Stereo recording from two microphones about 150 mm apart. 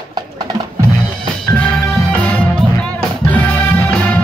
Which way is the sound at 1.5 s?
10° left (ahead or behind).